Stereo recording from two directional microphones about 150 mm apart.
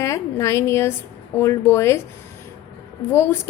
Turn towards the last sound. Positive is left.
turn(degrees=15)  # may be behind; listen again after turning